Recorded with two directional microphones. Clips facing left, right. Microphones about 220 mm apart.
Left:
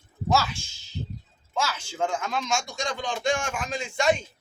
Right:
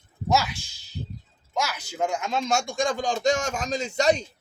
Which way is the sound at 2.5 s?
50° right (ahead or behind).